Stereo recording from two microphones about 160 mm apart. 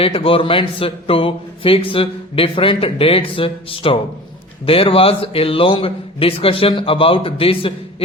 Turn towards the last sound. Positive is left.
turn(degrees=35)  # may be behind; listen again after turning